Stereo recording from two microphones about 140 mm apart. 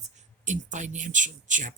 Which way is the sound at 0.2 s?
60° right (ahead or behind).